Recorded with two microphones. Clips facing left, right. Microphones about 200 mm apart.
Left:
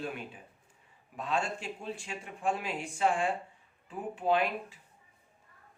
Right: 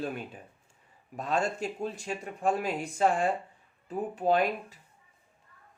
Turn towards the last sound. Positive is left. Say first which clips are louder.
# right 3 dB
turn(degrees=-40)  # may be behind; listen again after turning